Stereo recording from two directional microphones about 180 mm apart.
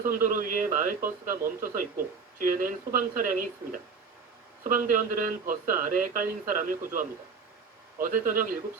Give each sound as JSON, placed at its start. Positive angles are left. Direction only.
{"t": 0.0, "sound": "speech", "side_deg": -50}